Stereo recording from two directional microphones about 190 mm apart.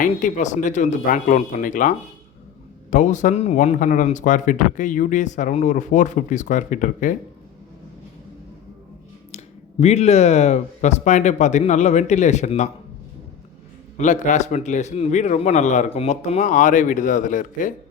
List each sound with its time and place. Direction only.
0.0 s speech: 40° left (ahead or behind)
9.8 s speech: 35° left (ahead or behind)
13.9 s speech: 40° left (ahead or behind)